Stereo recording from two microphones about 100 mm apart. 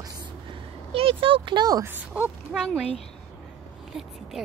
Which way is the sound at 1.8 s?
20° right (ahead or behind).